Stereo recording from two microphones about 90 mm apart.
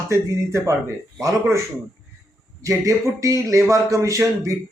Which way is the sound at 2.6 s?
35° right (ahead or behind).